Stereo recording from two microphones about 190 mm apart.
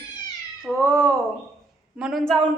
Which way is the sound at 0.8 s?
15° right (ahead or behind).